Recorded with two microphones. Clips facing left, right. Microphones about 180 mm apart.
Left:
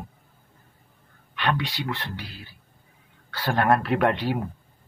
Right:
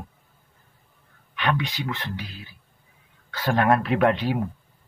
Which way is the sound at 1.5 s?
15° right (ahead or behind).